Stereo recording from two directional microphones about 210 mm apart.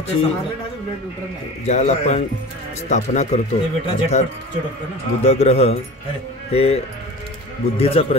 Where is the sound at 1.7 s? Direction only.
35° left (ahead or behind).